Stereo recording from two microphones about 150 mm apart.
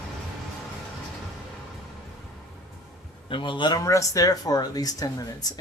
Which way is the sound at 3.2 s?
35° left (ahead or behind).